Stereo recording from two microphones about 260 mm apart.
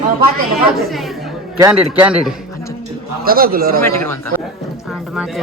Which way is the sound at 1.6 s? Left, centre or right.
Centre.